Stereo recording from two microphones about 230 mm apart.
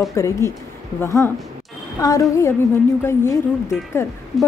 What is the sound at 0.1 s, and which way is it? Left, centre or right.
A woman's voice, centre.